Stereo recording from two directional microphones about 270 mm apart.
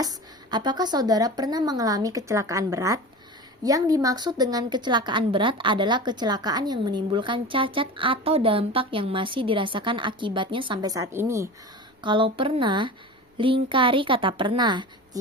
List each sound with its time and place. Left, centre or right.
0.0 s a woman's voice: centre